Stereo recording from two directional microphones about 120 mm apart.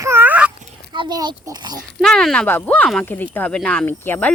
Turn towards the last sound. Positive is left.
turn(degrees=15)  # may be behind; listen again after turning